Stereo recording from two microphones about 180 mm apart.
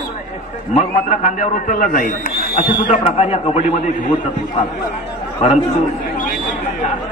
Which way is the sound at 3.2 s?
35° left (ahead or behind).